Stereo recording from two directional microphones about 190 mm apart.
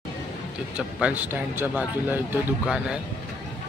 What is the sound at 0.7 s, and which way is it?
A man's voice, 5° right (ahead or behind).